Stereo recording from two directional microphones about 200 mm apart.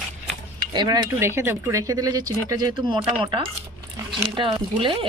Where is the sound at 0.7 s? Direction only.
25° right (ahead or behind).